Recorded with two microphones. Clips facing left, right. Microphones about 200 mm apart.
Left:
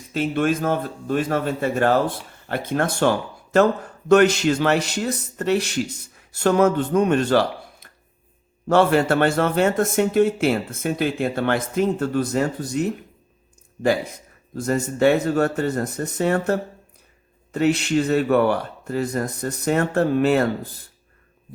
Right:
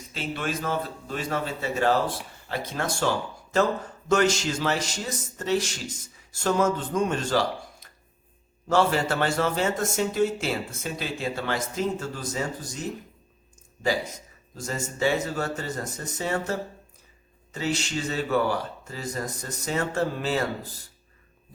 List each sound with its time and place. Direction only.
0.1 s a man's voice: 50° left (ahead or behind)